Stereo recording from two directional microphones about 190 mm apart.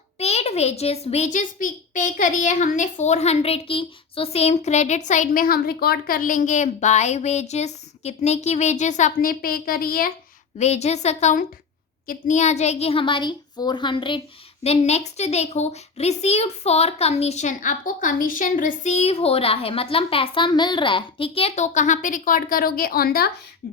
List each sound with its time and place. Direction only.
0.2 s a child's voice: 35° left (ahead or behind); by 10.1 s 50° left (ahead or behind)
10.6 s a child's voice: 35° left (ahead or behind); by 23.3 s 55° left (ahead or behind)